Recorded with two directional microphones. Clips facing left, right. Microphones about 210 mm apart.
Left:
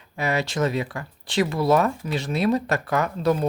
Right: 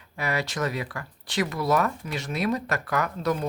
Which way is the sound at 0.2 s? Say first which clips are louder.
Left 4 dB; 25° left (ahead or behind).